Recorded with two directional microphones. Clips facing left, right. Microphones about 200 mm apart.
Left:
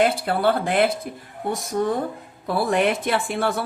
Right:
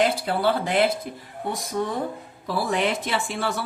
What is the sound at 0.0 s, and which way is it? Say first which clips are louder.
Speech: left 2 dB; 55° left (ahead or behind).